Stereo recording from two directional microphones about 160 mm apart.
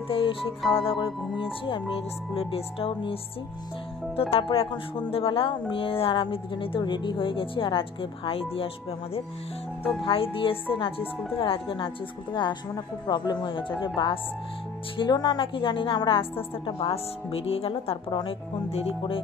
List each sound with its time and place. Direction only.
0.1 s speech: 35° left (ahead or behind)
4.2 s speech: 35° left (ahead or behind)
10.0 s a woman's voice: 35° left (ahead or behind)